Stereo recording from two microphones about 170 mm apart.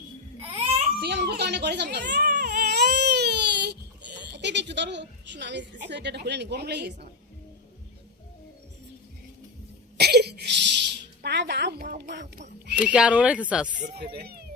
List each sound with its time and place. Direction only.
0.3 s baby cry: 35° right (ahead or behind)
1.0 s baby cry: 75° right (ahead or behind)
10.0 s a sound: 75° right (ahead or behind)
11.8 s speech: 60° right (ahead or behind)
12.7 s speech: 5° right (ahead or behind)
13.9 s speech: 70° right (ahead or behind)